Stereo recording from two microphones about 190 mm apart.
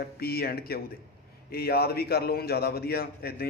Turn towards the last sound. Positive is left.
turn(degrees=55)  # may be behind; listen again after turning